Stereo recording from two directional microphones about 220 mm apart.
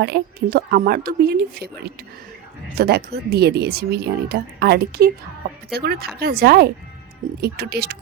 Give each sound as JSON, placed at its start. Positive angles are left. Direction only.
{"t": 0.0, "sound": "speech", "side_deg": -45}